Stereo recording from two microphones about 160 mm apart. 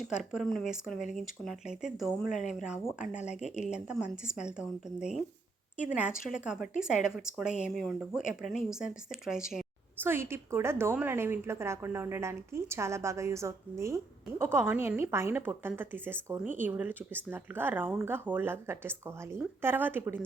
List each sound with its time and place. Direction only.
0.0 s a woman's voice: centre (ahead or behind)
10.0 s a woman's voice: 15° right (ahead or behind)